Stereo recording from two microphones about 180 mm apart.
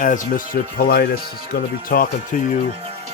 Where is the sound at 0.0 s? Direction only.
50° left (ahead or behind).